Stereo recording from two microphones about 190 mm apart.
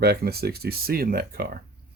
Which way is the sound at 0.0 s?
55° right (ahead or behind).